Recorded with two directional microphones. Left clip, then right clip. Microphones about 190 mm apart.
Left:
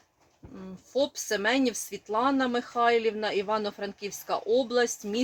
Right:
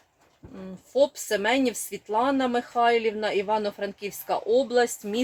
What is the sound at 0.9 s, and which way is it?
Speech, 15° right (ahead or behind).